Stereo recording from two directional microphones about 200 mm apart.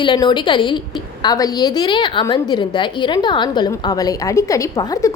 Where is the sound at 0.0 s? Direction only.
25° left (ahead or behind).